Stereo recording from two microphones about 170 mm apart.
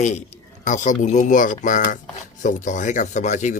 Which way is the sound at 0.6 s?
50° left (ahead or behind).